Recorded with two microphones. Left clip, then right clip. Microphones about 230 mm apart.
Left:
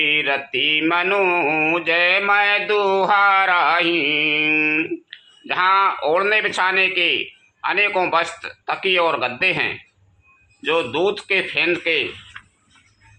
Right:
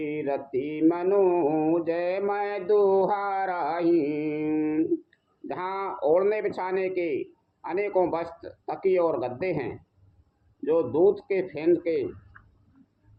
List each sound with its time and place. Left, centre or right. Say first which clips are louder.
0.0 s mantra: left 11 dB; left
3.5 s speech: left 12 dB; left
3.9 s mantra: left 8 dB; left
4.5 s a sound: left 8 dB; left
5.5 s speech: left 15 dB; left